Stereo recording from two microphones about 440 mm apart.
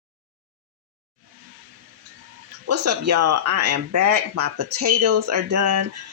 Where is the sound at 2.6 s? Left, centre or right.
Right.